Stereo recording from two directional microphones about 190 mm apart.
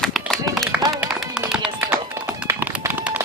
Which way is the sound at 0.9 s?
5° right (ahead or behind).